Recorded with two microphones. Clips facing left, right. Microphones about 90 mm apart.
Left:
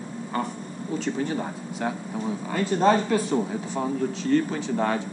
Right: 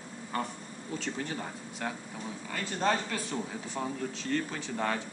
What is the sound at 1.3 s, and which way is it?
A man's voice, 25° left (ahead or behind).